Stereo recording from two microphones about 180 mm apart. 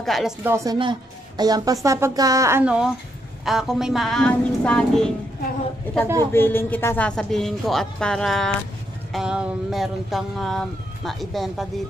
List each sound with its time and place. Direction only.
0.0 s speech: centre (ahead or behind)
0.5 s a woman's voice: 15° right (ahead or behind); by 5.1 s 5° left (ahead or behind)
6.3 s speech: 10° left (ahead or behind)